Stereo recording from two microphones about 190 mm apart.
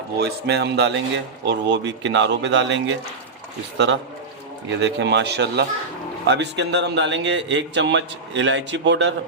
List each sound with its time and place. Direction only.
0.2 s speech: 60° right (ahead or behind)
4.8 s a man's voice: 65° right (ahead or behind)